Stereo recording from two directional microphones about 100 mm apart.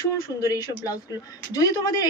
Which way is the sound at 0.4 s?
35° left (ahead or behind).